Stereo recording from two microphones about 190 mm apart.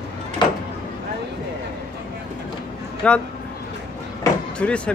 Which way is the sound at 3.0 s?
5° left (ahead or behind).